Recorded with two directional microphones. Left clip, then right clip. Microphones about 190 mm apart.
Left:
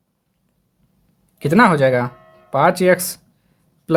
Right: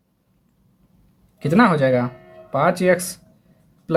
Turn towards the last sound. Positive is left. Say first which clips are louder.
# left 3 dB
turn(degrees=45)  # may be behind; listen again after turning